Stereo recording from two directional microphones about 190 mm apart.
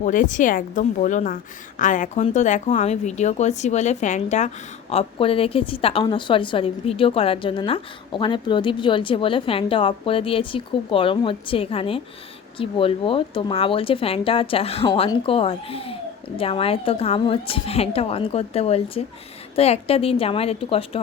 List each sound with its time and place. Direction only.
0.0 s a woman's voice: 40° left (ahead or behind)